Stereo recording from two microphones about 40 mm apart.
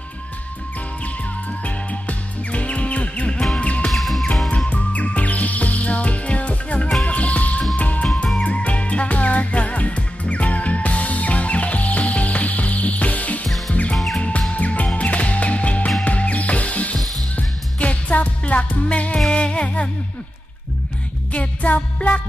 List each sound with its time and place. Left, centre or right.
1.6 s music: left
3.9 s music: centre
4.7 s music: left
19.1 s music: left
21.3 s music: left